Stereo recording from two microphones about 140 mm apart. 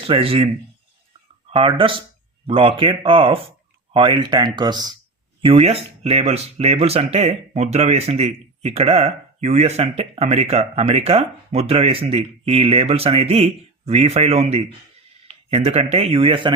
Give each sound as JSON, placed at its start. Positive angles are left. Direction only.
{"t": 0.0, "sound": "speech", "side_deg": -40}
{"t": 5.5, "sound": "speech", "side_deg": -40}